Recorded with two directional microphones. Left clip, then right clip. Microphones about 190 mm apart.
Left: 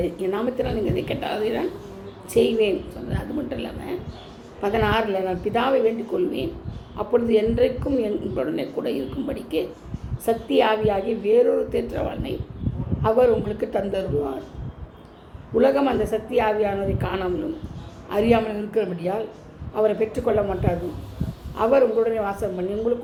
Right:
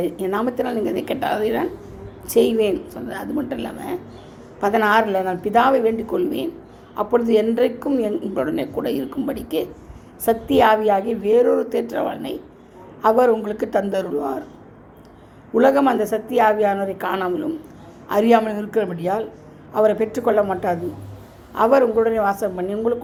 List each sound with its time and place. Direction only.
0.0 s a woman's voice: 40° right (ahead or behind)
15.5 s a woman's voice: 45° right (ahead or behind)